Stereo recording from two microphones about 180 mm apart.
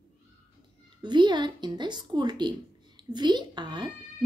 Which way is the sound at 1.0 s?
25° right (ahead or behind).